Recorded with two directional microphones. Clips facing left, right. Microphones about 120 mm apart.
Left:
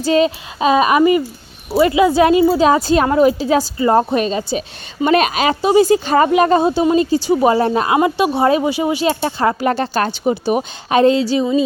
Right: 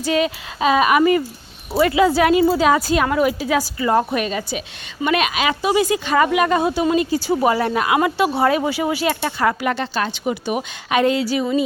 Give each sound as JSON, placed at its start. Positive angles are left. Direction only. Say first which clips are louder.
{"t": 0.0, "sound": "a woman's voice", "louder": "left 5 dB", "side_deg": 30}
{"t": 5.0, "sound": "a woman's voice", "louder": "left 5 dB", "side_deg": 40}
{"t": 7.3, "sound": "speech", "louder": "left 4 dB", "side_deg": 20}
{"t": 7.5, "sound": "a woman's voice", "louder": "left 4 dB", "side_deg": 30}
{"t": 10.2, "sound": "speech", "louder": "left 6 dB", "side_deg": 35}